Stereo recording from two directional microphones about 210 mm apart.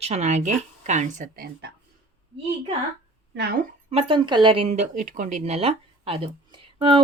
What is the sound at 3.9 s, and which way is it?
Speech, 20° right (ahead or behind).